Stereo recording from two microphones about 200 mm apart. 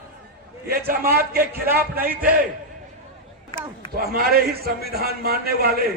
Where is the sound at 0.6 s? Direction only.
50° right (ahead or behind).